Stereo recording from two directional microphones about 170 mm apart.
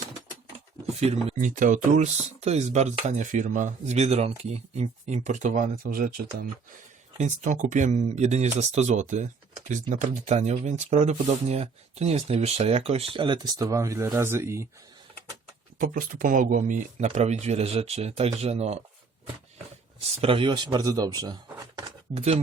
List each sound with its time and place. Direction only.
0.9 s speech: 40° right (ahead or behind); by 6.1 s 55° right (ahead or behind)
7.2 s speech: 45° right (ahead or behind); by 14.7 s 15° right (ahead or behind)
15.8 s speech: 55° right (ahead or behind); by 18.8 s 40° right (ahead or behind)
20.2 s speech: 30° right (ahead or behind)
21.8 s a sound: 35° right (ahead or behind)